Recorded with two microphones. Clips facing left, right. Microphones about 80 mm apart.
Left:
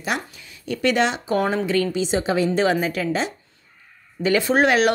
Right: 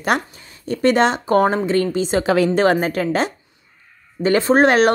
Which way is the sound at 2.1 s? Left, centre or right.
Right.